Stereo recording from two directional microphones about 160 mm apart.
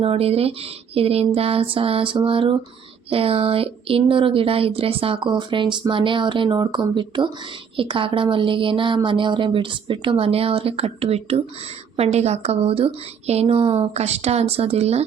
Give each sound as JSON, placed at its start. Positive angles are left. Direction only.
{"t": 0.0, "sound": "speech", "side_deg": -40}